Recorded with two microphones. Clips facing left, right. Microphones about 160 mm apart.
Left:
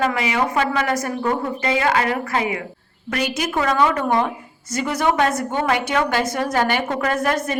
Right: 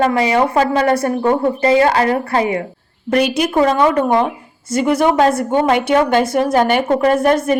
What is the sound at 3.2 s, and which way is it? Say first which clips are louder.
Speech: right 7 dB; 60° right (ahead or behind).